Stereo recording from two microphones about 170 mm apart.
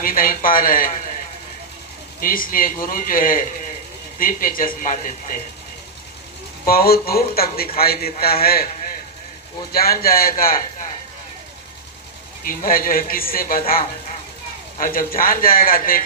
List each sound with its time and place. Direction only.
0.0 s a man's voice: 55° left (ahead or behind)
2.2 s a man's voice: 55° left (ahead or behind)
6.7 s a man's voice: 60° left (ahead or behind)
12.5 s a man's voice: 55° left (ahead or behind)